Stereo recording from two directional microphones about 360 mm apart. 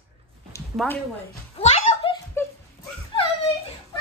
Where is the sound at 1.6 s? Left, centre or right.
Centre.